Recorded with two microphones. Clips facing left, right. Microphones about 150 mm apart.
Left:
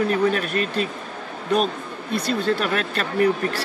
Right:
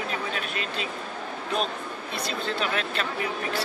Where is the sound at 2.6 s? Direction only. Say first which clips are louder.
Left 4 dB; 60° left (ahead or behind).